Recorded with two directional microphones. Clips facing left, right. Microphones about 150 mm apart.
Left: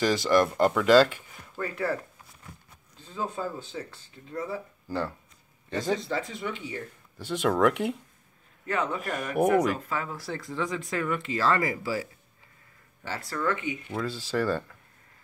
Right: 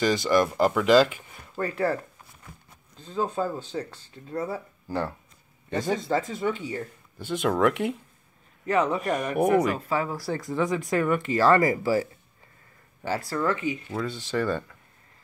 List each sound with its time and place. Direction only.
0.0 s speech: centre (ahead or behind)
1.6 s speech: 35° right (ahead or behind)
3.1 s speech: 35° right (ahead or behind)
4.8 s speech: 15° right (ahead or behind)
6.0 s speech: 40° right (ahead or behind)
7.2 s speech: centre (ahead or behind)
8.7 s speech: 40° right (ahead or behind)
9.3 s speech: centre (ahead or behind)
9.8 s speech: 35° right (ahead or behind)
13.9 s speech: 5° left (ahead or behind)